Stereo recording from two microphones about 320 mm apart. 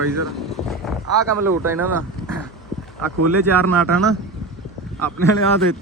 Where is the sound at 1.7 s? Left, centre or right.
Centre.